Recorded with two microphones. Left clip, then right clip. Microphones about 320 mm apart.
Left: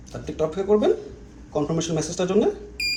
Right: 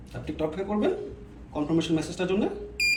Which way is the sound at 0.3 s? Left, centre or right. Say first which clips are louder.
Left 8 dB; centre.